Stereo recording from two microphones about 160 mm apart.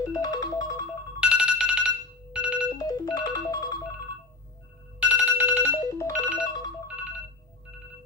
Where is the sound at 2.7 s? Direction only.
25° left (ahead or behind).